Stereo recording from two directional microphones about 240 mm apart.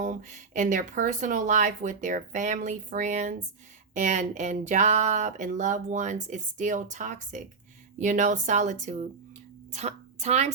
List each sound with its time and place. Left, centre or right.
0.0 s a woman's voice: right